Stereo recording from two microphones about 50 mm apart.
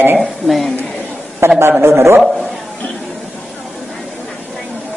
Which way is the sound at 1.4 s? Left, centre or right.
Right.